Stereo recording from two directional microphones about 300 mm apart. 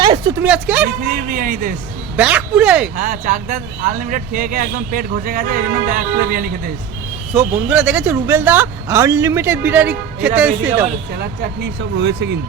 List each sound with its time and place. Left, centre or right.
0.0 s speech: centre
1.0 s speech: right
2.1 s speech: centre
2.9 s speech: right
7.3 s speech: centre
10.8 s speech: right